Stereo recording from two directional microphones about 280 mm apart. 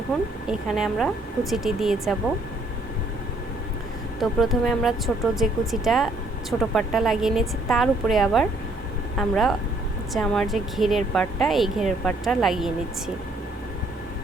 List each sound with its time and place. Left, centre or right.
0.8 s speech: centre
4.2 s speech: centre